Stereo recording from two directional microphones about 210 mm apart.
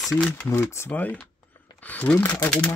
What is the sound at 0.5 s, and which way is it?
Speech, 10° left (ahead or behind).